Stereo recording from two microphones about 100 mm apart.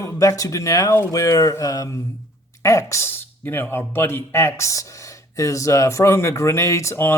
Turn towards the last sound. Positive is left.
turn(degrees=25)  # may be behind; listen again after turning